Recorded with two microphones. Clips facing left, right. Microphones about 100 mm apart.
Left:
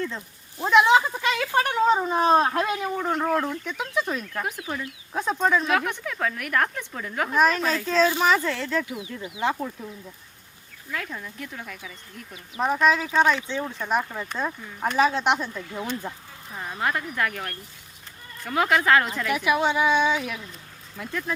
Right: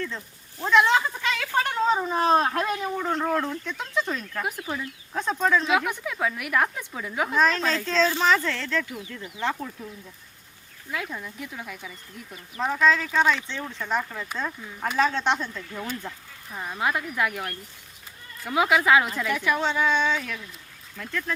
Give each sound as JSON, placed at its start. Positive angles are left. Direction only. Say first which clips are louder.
{"t": 0.6, "sound": "a woman's voice", "louder": "left 2 dB", "side_deg": 15}
{"t": 7.3, "sound": "speech", "louder": "left 2 dB", "side_deg": 10}
{"t": 10.9, "sound": "a woman's voice", "louder": "right 1 dB", "side_deg": -5}
{"t": 12.5, "sound": "speech", "louder": "left 1 dB", "side_deg": 15}
{"t": 16.6, "sound": "a woman's voice", "louder": "even", "side_deg": -5}
{"t": 19.3, "sound": "speech", "louder": "left 4 dB", "side_deg": 15}